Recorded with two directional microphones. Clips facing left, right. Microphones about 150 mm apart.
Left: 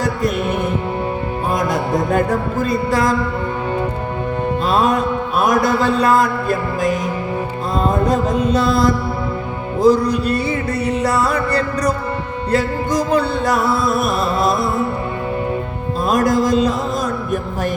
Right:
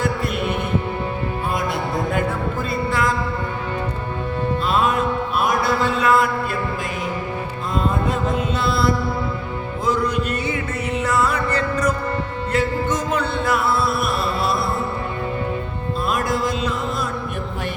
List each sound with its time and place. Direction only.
2.1 s music: 40° left (ahead or behind)
4.6 s music: 40° left (ahead or behind)
16.0 s music: 40° left (ahead or behind)